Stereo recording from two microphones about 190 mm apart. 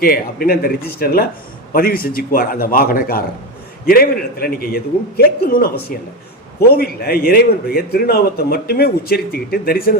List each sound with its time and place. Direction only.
0.0 s a man's voice: 50° left (ahead or behind)